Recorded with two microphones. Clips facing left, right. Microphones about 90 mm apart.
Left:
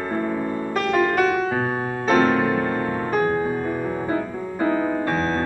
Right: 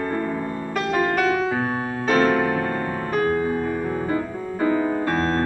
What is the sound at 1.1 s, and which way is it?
Music, 10° right (ahead or behind).